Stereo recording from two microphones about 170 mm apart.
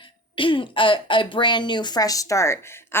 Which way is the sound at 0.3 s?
30° left (ahead or behind).